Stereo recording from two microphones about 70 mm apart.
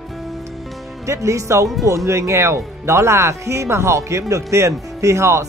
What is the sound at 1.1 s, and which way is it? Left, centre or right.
Speech, right.